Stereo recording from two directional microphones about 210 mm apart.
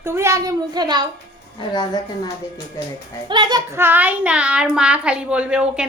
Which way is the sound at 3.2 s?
20° right (ahead or behind).